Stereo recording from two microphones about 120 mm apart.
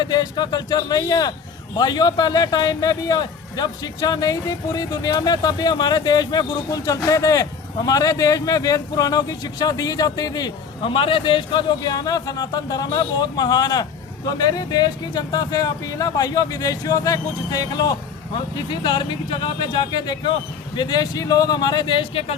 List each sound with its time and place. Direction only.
0.0 s speech: 35° left (ahead or behind)
11.8 s speech: 30° left (ahead or behind); by 22.4 s 55° left (ahead or behind)